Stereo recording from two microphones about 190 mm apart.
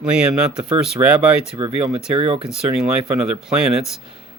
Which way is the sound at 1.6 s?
30° right (ahead or behind).